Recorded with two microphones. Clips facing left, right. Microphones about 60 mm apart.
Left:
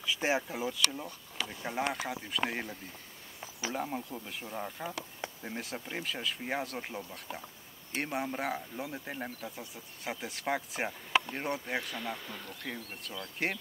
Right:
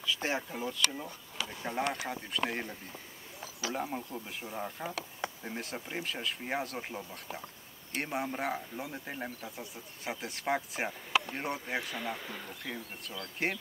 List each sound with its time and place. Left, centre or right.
0.0 s speech: centre